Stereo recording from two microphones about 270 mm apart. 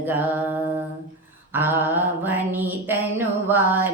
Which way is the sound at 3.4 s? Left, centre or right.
Centre.